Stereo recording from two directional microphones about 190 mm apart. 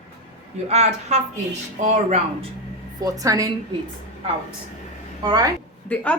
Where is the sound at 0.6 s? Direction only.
35° right (ahead or behind).